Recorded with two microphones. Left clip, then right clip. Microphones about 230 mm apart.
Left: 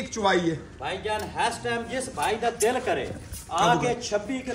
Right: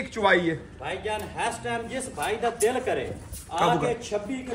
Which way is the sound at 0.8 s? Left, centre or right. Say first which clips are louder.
Left 1 dB; left.